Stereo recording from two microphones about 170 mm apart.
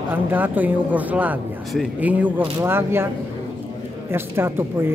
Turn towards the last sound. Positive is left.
turn(degrees=-15)  # may be behind; listen again after turning